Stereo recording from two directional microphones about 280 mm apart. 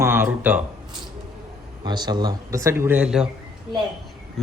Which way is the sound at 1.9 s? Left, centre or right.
Centre.